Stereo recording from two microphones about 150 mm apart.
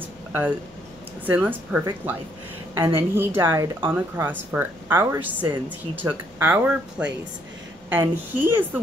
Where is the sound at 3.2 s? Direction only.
15° right (ahead or behind).